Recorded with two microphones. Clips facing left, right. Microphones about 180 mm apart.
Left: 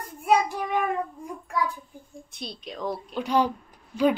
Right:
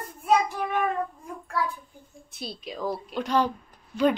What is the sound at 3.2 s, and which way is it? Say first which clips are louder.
Speech: left 1 dB; 10° left (ahead or behind).